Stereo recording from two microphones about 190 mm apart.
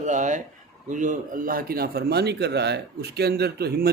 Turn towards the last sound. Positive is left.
turn(degrees=-55)  # may be behind; listen again after turning